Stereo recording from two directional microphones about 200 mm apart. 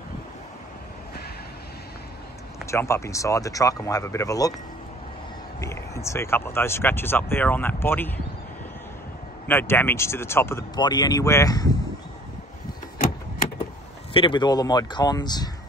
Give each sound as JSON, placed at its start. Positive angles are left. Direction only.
{"t": 2.7, "sound": "speech", "side_deg": 15}
{"t": 5.6, "sound": "speech", "side_deg": 15}
{"t": 9.5, "sound": "speech", "side_deg": 10}
{"t": 14.1, "sound": "speech", "side_deg": 25}